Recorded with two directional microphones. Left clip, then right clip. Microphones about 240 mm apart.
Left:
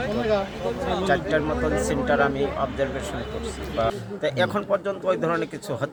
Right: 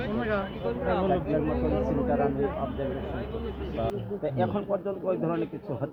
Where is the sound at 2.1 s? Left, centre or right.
Left.